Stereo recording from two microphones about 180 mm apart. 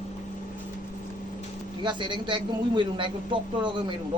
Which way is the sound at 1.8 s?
25° right (ahead or behind).